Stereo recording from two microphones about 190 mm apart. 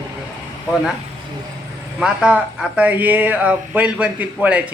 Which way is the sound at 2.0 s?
5° right (ahead or behind).